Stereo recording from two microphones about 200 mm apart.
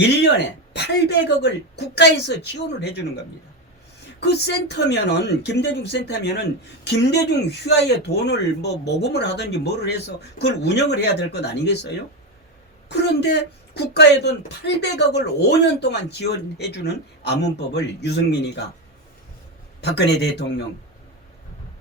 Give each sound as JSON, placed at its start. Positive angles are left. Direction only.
{"t": 0.0, "sound": "speech", "side_deg": 55}
{"t": 4.2, "sound": "speech", "side_deg": 55}
{"t": 12.9, "sound": "speech", "side_deg": 55}
{"t": 19.8, "sound": "speech", "side_deg": 55}